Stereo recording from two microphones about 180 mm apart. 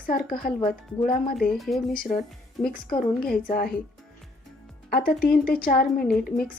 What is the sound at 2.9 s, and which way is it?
Speech, 55° left (ahead or behind).